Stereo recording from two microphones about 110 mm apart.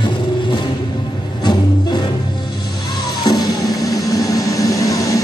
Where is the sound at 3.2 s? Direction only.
35° left (ahead or behind).